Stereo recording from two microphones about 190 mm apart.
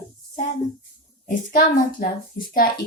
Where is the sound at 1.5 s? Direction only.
45° left (ahead or behind).